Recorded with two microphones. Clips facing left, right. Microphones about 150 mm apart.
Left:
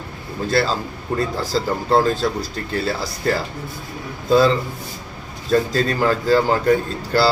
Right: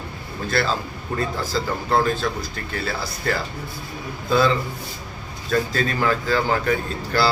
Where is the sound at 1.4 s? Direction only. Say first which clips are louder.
Left 3 dB; 35° left (ahead or behind).